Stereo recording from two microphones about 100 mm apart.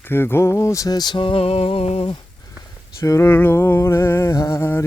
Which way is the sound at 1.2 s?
65° left (ahead or behind).